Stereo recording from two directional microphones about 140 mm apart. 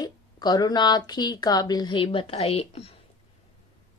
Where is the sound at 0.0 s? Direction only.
30° left (ahead or behind); by 3.0 s 45° left (ahead or behind).